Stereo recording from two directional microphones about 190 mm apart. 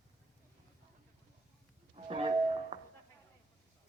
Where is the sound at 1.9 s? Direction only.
30° right (ahead or behind).